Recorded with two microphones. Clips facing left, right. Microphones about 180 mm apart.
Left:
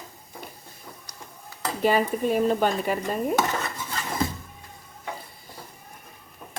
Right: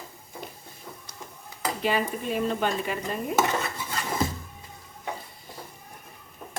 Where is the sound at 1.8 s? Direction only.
45° left (ahead or behind).